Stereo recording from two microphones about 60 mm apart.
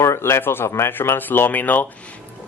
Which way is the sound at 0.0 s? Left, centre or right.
Left.